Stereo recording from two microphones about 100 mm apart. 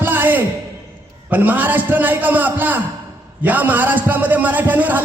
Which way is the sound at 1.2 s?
20° right (ahead or behind).